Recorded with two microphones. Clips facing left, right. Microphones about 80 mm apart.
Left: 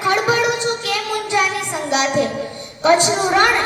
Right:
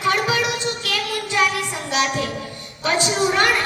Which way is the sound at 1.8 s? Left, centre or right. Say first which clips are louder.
Left 5 dB; left.